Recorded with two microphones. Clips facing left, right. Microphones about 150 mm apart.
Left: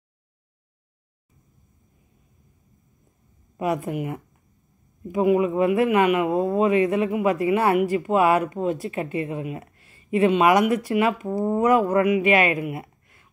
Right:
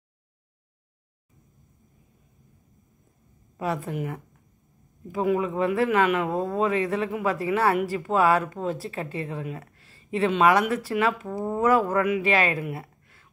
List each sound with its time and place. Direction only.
3.5 s speech: 20° left (ahead or behind)